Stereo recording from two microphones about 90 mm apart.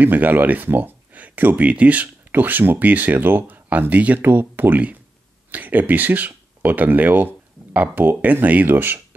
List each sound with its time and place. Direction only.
0.0 s speech: 20° right (ahead or behind)